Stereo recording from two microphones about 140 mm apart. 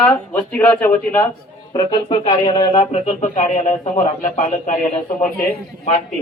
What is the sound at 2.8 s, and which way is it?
A man's voice, 55° left (ahead or behind).